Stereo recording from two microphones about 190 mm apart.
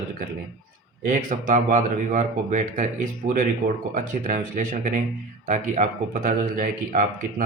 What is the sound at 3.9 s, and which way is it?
Speech, 45° right (ahead or behind).